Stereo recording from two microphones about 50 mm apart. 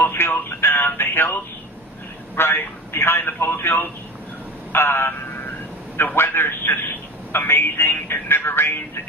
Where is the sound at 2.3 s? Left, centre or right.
Left.